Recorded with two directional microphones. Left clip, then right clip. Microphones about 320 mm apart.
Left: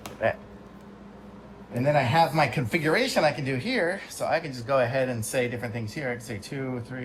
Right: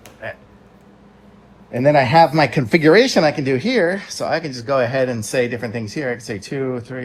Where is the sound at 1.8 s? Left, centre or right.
Right.